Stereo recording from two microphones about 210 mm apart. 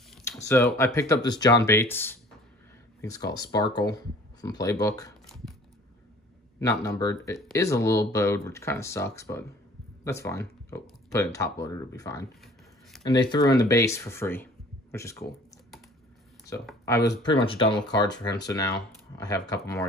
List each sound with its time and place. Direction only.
0.4 s speech: 15° left (ahead or behind)
5.3 s a sound: centre (ahead or behind)
6.6 s speech: 15° left (ahead or behind)
17.2 s speech: 25° left (ahead or behind)